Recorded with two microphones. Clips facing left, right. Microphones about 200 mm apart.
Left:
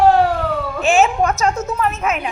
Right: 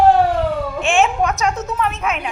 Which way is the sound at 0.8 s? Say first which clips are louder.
Left 3 dB; centre (ahead or behind).